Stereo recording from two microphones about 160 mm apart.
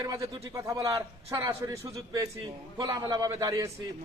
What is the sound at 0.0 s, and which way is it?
A man's voice, 20° right (ahead or behind).